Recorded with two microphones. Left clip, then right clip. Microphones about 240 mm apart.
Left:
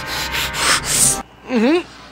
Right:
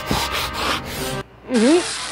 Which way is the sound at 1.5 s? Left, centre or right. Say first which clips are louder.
Even; centre.